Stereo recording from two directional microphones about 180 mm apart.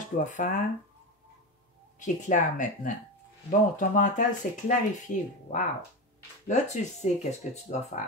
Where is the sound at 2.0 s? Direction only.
45° left (ahead or behind).